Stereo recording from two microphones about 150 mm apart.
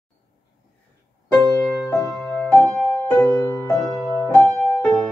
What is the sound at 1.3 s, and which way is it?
Music, 10° left (ahead or behind).